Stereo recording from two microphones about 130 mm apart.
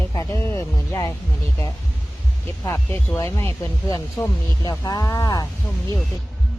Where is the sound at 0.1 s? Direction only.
25° left (ahead or behind).